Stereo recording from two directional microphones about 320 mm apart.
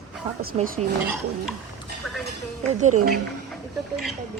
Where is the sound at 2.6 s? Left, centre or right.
Right.